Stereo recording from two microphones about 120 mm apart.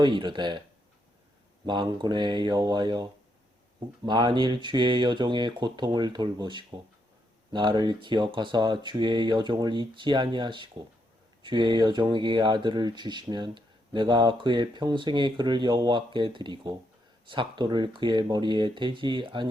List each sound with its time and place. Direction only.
0.0 s speech: 40° right (ahead or behind)
1.6 s speech: 40° right (ahead or behind)